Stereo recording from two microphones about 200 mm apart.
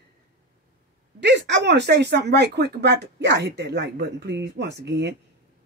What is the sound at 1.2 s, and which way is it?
Speech, 60° right (ahead or behind).